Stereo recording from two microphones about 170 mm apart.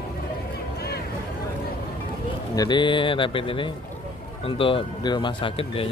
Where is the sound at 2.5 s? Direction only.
25° left (ahead or behind).